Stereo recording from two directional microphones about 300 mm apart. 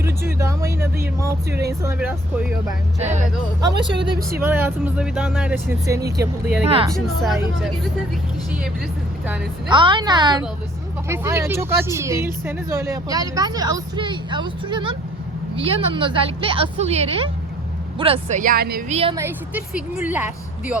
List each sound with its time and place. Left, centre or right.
0.3 s a sound: centre
1.8 s speech: centre
3.0 s speech: right
6.9 s speech: centre
9.2 s speech: centre
9.6 s speech: centre; by 18.9 s right
18.9 s speech: centre